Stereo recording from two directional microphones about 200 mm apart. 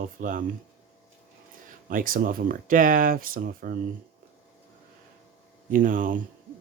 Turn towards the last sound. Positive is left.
turn(degrees=-40)  # may be behind; listen again after turning